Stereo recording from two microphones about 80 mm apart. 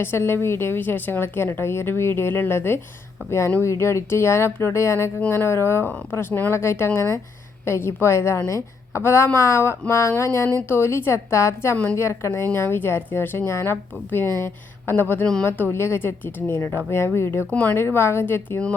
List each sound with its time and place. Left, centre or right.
0.0 s a woman's voice: left
17.5 s a woman's voice: centre